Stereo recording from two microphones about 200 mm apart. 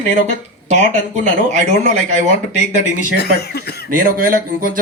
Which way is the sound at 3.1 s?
55° left (ahead or behind).